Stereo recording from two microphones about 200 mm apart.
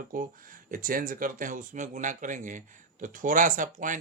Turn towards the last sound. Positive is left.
turn(degrees=-40)  # may be behind; listen again after turning